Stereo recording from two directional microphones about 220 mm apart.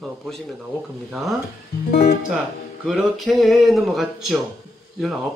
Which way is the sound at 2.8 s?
Centre (ahead or behind).